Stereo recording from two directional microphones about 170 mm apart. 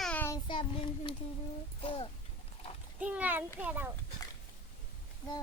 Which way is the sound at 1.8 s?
30° left (ahead or behind).